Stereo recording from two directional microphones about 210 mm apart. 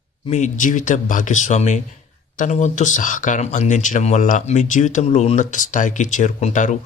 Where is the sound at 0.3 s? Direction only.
35° left (ahead or behind).